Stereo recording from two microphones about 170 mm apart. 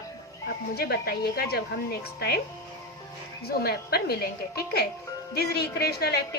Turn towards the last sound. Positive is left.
turn(degrees=70)  # may be behind; listen again after turning